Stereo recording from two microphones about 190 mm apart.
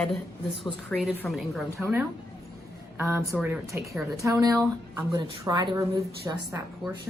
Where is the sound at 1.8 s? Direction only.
15° right (ahead or behind).